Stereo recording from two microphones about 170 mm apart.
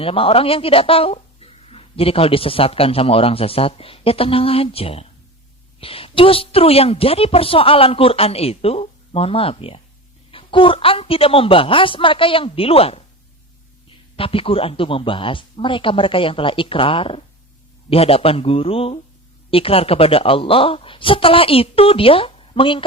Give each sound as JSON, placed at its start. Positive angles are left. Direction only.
{"t": 0.0, "sound": "a woman's voice", "side_deg": 35}
{"t": 14.2, "sound": "a woman's voice", "side_deg": 35}